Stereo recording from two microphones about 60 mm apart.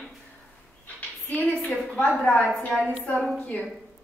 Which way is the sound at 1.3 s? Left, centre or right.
Left.